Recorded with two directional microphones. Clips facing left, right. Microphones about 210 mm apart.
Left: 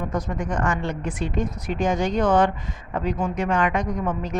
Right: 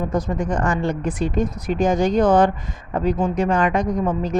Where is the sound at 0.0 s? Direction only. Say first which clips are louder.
Right 5 dB; 30° right (ahead or behind).